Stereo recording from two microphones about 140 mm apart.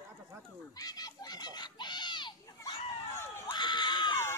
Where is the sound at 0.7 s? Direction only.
25° left (ahead or behind).